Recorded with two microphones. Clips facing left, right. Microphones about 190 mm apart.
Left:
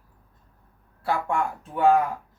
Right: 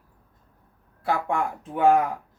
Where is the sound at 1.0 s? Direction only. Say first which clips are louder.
Even; 20° right (ahead or behind).